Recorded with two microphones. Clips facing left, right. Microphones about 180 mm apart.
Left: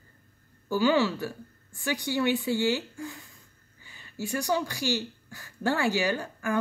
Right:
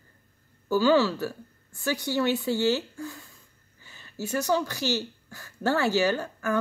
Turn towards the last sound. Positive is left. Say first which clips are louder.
# right 1 dB
turn(degrees=15)  # may be behind; listen again after turning